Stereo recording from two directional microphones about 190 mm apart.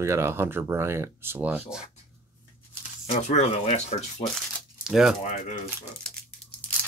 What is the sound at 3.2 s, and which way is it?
Speech, 35° left (ahead or behind).